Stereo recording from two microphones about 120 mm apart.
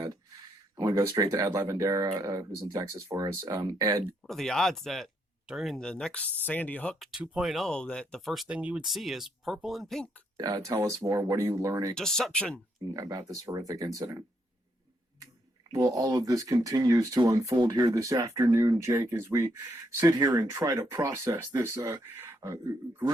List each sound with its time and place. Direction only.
0.8 s speech: 25° right (ahead or behind)
4.3 s speech: 5° left (ahead or behind)
7.0 s speech: 5° right (ahead or behind)
10.3 s speech: 30° right (ahead or behind)
11.9 s speech: 5° left (ahead or behind)
12.9 s speech: 30° right (ahead or behind)
15.7 s speech: 30° right (ahead or behind)